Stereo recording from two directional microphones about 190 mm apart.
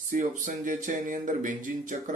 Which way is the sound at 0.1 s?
45° right (ahead or behind).